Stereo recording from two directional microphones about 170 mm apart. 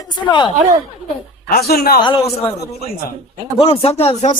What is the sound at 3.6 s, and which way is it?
Speech, 35° left (ahead or behind).